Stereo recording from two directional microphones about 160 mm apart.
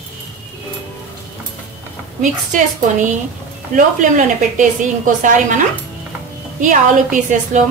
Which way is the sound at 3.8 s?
55° right (ahead or behind).